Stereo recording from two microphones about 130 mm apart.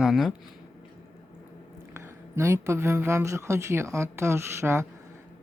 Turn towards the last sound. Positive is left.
turn(degrees=-20)  # may be behind; listen again after turning